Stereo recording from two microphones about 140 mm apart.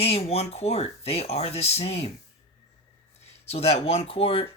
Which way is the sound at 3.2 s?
50° left (ahead or behind).